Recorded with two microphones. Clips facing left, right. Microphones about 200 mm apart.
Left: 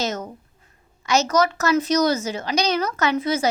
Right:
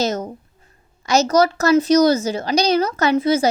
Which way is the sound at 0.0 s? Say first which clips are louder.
Right 5 dB; 35° right (ahead or behind).